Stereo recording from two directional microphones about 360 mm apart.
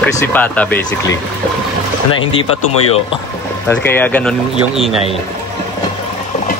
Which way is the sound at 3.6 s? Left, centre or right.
Centre.